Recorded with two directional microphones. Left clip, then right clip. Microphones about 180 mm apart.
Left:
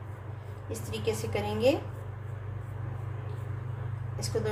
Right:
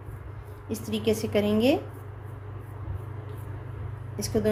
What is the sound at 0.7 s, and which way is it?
A woman's voice, 70° right (ahead or behind).